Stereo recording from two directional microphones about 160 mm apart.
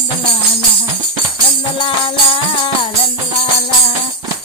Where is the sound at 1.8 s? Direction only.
35° left (ahead or behind).